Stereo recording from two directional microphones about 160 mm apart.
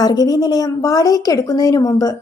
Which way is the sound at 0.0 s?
25° left (ahead or behind).